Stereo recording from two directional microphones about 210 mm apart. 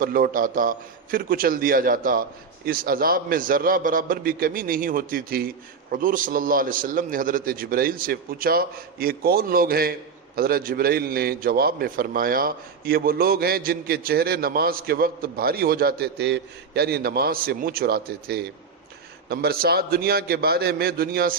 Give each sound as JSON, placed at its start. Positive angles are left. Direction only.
{"t": 0.0, "sound": "a man's voice", "side_deg": -40}